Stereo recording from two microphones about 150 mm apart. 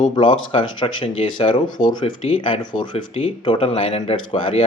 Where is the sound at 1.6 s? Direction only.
65° left (ahead or behind).